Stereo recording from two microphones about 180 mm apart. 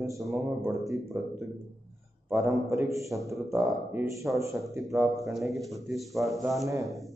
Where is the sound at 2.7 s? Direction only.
15° right (ahead or behind).